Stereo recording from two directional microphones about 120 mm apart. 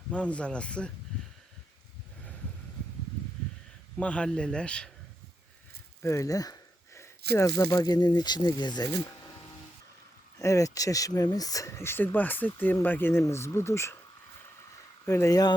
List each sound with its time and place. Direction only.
0.1 s speech: 10° left (ahead or behind)
3.9 s speech: 10° left (ahead or behind)
6.0 s speech: 25° left (ahead or behind)
10.3 s speech: 25° left (ahead or behind)
15.0 s speech: 25° left (ahead or behind)